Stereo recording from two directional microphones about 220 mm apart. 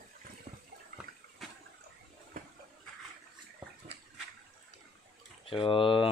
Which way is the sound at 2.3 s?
40° right (ahead or behind).